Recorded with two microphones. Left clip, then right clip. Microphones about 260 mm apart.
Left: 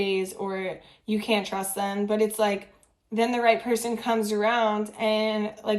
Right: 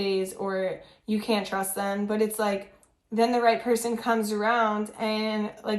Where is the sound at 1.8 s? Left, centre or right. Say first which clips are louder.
Left 3 dB; left.